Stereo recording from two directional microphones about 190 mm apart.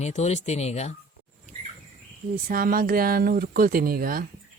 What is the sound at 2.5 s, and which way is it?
Speech, 50° right (ahead or behind).